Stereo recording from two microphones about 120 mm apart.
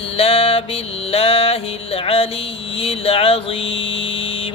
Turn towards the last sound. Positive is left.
turn(degrees=50)  # may be behind; listen again after turning